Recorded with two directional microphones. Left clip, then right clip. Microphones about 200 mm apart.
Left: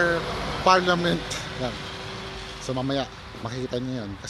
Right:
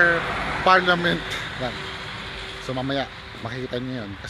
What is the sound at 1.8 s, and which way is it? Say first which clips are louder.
Vehicle: right 3 dB; 60° left (ahead or behind).